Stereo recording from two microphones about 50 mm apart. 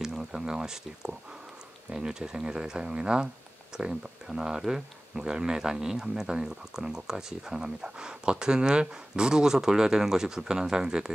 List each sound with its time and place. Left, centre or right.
0.0 s speech: centre